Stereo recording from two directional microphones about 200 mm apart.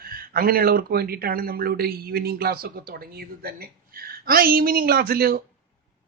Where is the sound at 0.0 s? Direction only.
45° right (ahead or behind).